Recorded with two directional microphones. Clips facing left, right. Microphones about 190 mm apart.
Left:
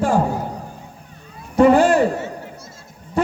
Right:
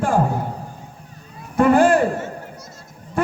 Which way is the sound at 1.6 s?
50° right (ahead or behind).